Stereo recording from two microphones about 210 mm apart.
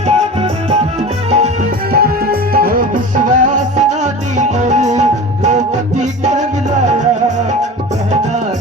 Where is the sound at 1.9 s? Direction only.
45° right (ahead or behind).